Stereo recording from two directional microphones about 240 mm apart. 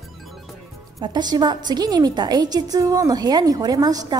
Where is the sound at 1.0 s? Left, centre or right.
Centre.